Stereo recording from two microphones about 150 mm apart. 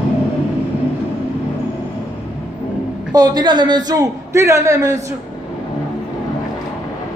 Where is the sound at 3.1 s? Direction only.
25° right (ahead or behind).